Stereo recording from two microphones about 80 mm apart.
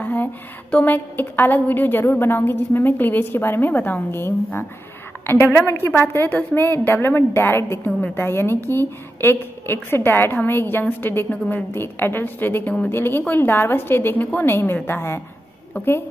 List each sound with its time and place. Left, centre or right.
0.0 s a woman's voice: left